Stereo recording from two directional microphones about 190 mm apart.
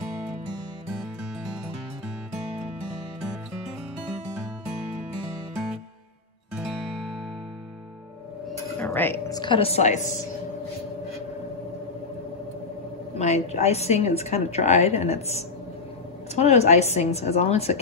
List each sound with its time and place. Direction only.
6.5 s music: 5° right (ahead or behind)
8.7 s speech: 10° left (ahead or behind)
9.4 s a woman's voice: 30° left (ahead or behind)
13.1 s a woman's voice: 35° left (ahead or behind)